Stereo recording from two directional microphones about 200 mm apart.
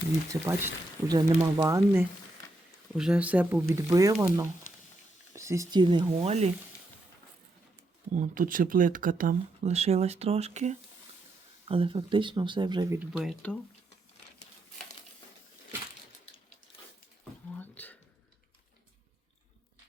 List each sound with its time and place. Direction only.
0.4 s speech: 15° right (ahead or behind)
2.9 s speech: 5° right (ahead or behind); by 6.5 s 35° right (ahead or behind)
8.1 s speech: 40° right (ahead or behind); by 13.0 s 20° right (ahead or behind)
13.0 s speech: centre (ahead or behind)
17.6 s a sound: 10° left (ahead or behind)